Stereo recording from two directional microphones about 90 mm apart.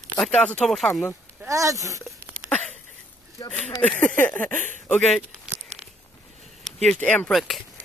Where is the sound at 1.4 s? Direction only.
35° right (ahead or behind).